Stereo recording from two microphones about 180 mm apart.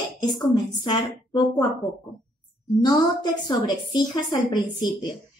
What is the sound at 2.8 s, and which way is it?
A woman's voice, 25° left (ahead or behind).